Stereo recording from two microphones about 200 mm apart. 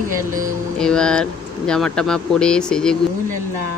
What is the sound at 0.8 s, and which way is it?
Speech, 5° left (ahead or behind).